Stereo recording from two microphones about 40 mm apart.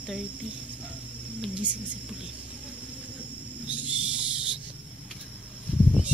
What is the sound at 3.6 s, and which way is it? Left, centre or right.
Owl, right.